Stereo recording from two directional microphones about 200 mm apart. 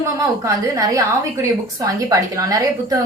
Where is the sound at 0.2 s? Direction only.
15° right (ahead or behind).